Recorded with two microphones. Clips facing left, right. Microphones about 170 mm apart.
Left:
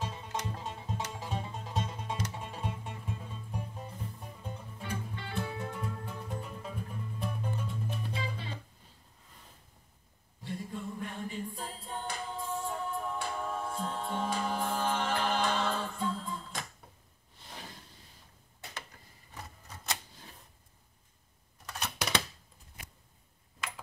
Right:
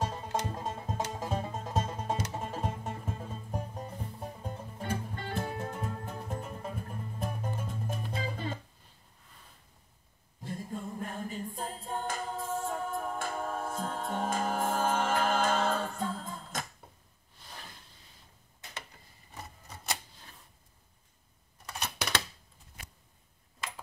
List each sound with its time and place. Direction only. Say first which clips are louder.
0.0 s music: right 4 dB; 45° right (ahead or behind)
10.4 s a capella: even; 40° right (ahead or behind)
21.6 s a sound: even; centre (ahead or behind)